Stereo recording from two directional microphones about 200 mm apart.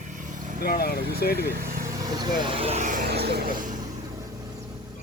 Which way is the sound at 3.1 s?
55° right (ahead or behind).